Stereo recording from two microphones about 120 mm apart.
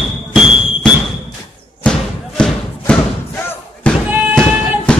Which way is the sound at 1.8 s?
5° left (ahead or behind).